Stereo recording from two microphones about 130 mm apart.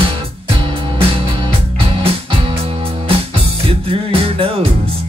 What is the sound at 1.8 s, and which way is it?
Music, 50° right (ahead or behind).